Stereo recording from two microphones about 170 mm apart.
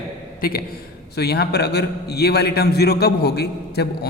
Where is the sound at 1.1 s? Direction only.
70° left (ahead or behind).